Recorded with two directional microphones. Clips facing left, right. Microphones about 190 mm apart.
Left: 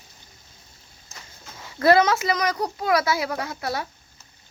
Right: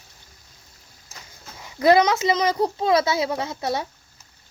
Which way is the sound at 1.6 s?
15° right (ahead or behind).